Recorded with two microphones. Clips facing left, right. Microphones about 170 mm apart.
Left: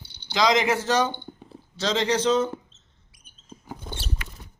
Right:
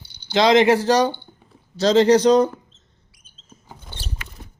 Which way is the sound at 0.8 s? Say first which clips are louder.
Right 6 dB; 35° right (ahead or behind).